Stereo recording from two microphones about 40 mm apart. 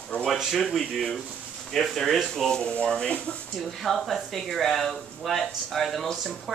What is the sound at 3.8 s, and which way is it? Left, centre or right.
Speech, centre.